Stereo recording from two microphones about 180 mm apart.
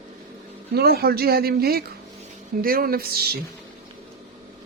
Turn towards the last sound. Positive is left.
turn(degrees=-60)  # may be behind; listen again after turning